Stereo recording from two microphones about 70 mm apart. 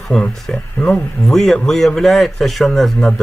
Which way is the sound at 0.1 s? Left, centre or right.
Centre.